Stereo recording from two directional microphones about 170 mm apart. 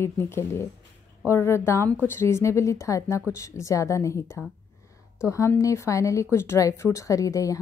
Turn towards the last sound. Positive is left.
turn(degrees=20)  # may be behind; listen again after turning